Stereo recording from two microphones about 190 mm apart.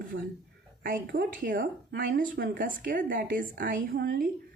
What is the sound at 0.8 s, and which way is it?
Speech, 50° right (ahead or behind).